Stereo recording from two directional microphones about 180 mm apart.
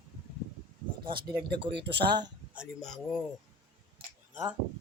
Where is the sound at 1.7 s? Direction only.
70° right (ahead or behind).